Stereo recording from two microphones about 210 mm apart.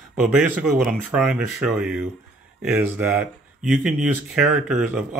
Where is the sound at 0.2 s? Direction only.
Centre (ahead or behind).